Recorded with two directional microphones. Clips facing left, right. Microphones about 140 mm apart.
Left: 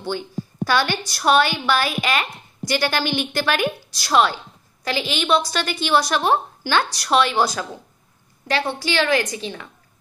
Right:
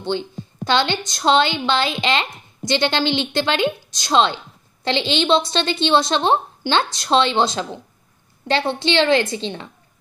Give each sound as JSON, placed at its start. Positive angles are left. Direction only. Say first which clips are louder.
{"t": 0.0, "sound": "a woman's voice", "louder": "right 2 dB", "side_deg": -20}